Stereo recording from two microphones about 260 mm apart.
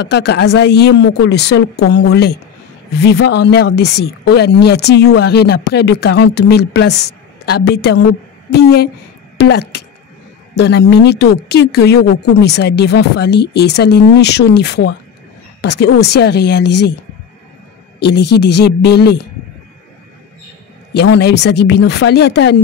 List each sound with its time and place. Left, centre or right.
0.0 s a woman's voice: left
17.9 s speech: left
20.9 s speech: left